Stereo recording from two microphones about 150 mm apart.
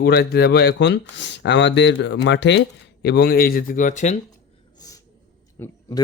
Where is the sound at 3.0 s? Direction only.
90° left; by 4.2 s 55° left (ahead or behind).